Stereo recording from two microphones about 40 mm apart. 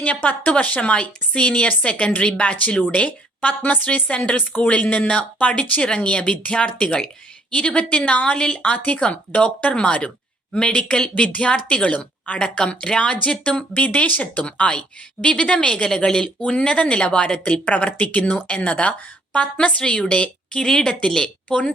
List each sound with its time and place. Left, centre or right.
0.0 s speech: left
3.4 s speech: left
9.7 s speech: left
12.4 s speech: left
14.4 s speech: left
17.7 s speech: left
20.7 s speech: centre